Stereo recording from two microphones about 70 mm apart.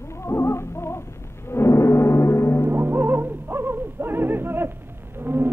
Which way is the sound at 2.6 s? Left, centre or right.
Right.